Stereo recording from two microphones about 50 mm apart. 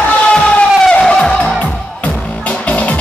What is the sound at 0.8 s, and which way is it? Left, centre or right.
Music, centre.